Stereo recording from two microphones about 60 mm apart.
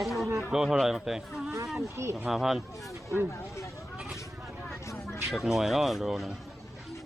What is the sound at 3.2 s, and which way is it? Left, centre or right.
Speech, left.